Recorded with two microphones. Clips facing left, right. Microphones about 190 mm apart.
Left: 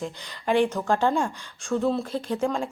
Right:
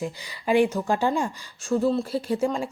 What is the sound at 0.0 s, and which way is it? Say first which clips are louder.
Speech: right 1 dB; 10° right (ahead or behind).